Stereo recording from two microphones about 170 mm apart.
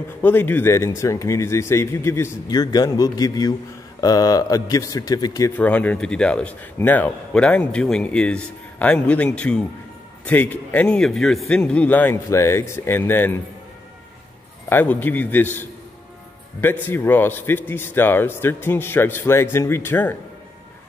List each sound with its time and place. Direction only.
0.2 s a man's voice: 10° left (ahead or behind)
5.6 s a man's voice: 10° left (ahead or behind)
14.7 s a man's voice: 10° left (ahead or behind)
16.6 s a man's voice: 15° left (ahead or behind)